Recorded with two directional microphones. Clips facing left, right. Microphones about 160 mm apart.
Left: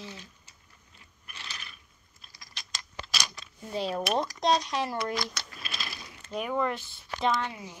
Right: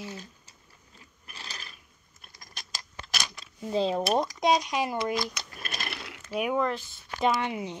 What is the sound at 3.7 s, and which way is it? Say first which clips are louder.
Speech: right 4 dB; 30° right (ahead or behind).